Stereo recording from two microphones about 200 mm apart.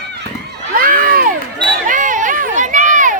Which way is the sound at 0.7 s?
45° right (ahead or behind).